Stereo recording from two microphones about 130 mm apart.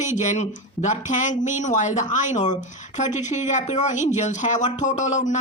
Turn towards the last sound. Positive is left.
turn(degrees=65)  # may be behind; listen again after turning